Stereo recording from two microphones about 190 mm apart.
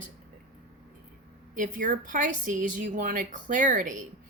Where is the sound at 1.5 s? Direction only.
45° right (ahead or behind).